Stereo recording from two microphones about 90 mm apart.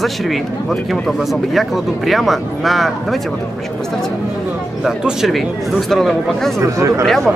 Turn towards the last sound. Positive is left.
turn(degrees=0)  # may be behind; listen again after turning